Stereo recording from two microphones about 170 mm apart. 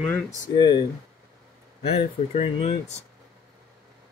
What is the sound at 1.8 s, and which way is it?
Speech, 35° left (ahead or behind).